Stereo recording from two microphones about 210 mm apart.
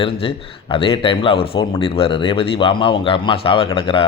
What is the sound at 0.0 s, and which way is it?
Speech, 25° left (ahead or behind).